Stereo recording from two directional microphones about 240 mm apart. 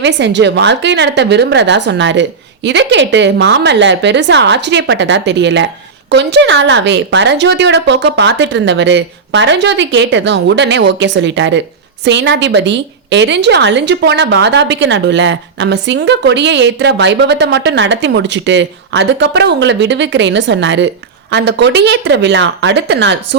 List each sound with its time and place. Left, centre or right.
0.0 s a woman's voice: right